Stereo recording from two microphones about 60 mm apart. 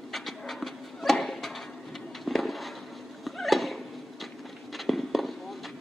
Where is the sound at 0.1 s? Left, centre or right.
Centre.